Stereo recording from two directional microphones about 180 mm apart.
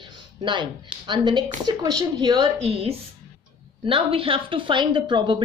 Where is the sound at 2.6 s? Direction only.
35° right (ahead or behind).